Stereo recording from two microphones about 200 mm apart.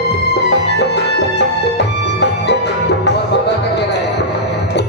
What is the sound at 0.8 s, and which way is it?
Music, 60° left (ahead or behind).